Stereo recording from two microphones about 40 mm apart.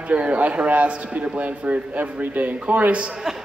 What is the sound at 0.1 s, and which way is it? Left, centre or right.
Speech, right.